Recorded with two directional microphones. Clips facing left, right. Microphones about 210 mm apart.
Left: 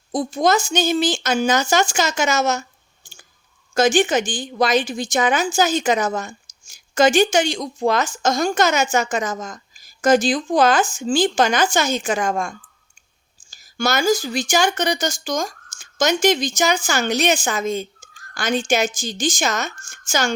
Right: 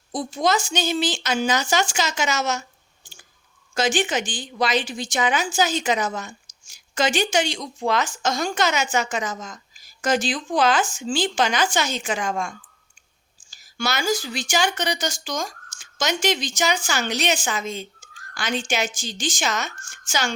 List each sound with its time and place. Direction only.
0.1 s a woman's voice: 45° left (ahead or behind)
3.8 s a woman's voice: 45° left (ahead or behind)